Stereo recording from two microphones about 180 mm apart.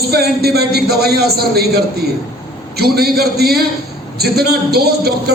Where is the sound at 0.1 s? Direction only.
60° right (ahead or behind).